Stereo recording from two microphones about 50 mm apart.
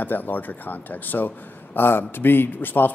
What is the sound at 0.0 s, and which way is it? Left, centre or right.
Speech, left.